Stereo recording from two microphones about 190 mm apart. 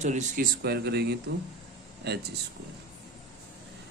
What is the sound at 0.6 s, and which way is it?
Speech, 60° right (ahead or behind).